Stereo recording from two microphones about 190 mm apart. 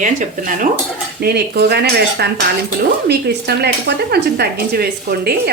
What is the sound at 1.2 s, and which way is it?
Cutlery, 55° right (ahead or behind).